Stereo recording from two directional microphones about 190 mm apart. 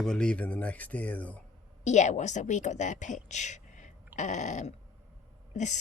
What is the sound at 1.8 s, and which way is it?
A woman's voice, 40° left (ahead or behind).